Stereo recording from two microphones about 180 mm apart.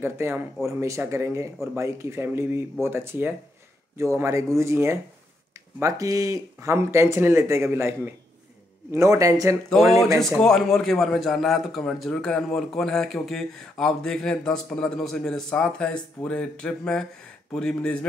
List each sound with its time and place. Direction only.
0.0 s speech: 15° right (ahead or behind)
9.7 s a man's voice: centre (ahead or behind)